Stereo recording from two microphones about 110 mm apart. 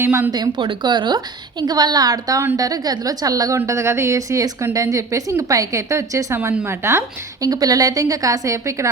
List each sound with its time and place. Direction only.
0.0 s a woman's voice: 20° right (ahead or behind)
0.3 s a woman's voice: 40° right (ahead or behind)